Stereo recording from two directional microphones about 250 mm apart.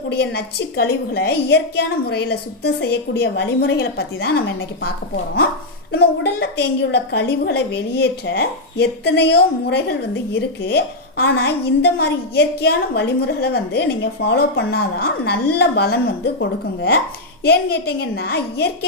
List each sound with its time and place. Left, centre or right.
0.1 s a woman's voice: left